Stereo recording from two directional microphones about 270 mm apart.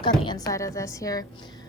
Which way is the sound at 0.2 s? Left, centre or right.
Centre.